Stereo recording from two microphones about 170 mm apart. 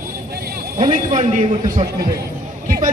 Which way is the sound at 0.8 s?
50° right (ahead or behind).